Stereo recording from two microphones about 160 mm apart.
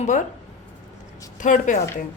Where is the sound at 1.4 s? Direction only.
50° left (ahead or behind).